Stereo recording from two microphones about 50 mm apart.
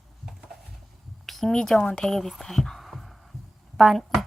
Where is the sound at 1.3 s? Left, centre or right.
Centre.